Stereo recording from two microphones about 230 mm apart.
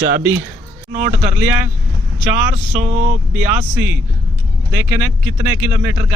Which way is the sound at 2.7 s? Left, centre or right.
Right.